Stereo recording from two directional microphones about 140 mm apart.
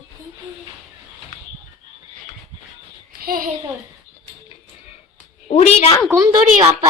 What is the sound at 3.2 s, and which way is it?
Speech, 90° right.